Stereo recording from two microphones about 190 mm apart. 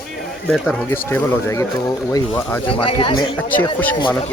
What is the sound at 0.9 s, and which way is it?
Speech, 15° left (ahead or behind).